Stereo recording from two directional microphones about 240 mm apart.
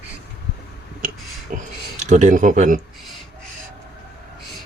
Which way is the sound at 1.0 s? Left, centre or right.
Right.